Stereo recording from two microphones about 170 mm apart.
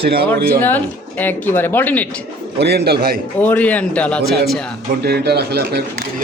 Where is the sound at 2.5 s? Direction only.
75° right (ahead or behind).